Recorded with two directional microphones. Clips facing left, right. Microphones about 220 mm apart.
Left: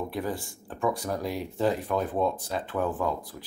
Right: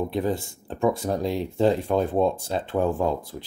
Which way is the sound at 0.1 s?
25° right (ahead or behind).